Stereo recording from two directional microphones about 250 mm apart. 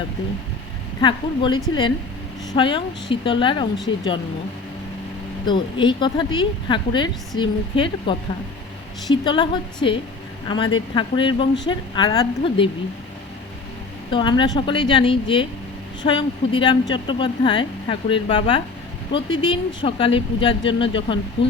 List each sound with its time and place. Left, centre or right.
1.0 s speech: centre
5.5 s speech: centre
9.2 s speech: centre
14.1 s speech: centre
21.4 s speech: left